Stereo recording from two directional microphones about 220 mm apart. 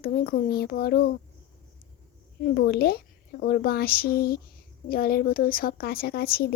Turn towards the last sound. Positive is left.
turn(degrees=45)  # may be behind; listen again after turning